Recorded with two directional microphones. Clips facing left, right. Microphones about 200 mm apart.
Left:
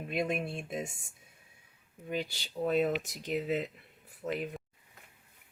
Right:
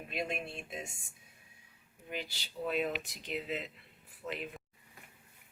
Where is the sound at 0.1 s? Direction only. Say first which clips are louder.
Left 6 dB; 50° left (ahead or behind).